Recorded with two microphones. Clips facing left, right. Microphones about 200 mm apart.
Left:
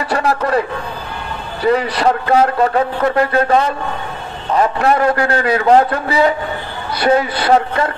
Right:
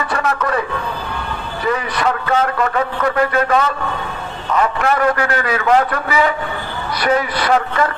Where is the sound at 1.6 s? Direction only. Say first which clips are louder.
Left 5 dB; 35° left (ahead or behind).